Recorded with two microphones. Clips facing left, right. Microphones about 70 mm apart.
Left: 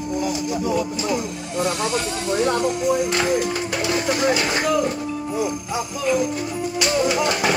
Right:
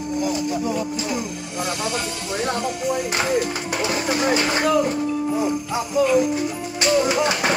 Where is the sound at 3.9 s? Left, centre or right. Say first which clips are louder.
Left 1 dB; right.